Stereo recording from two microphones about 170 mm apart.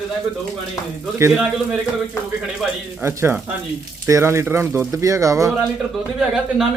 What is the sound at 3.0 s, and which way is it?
Speech, 15° right (ahead or behind).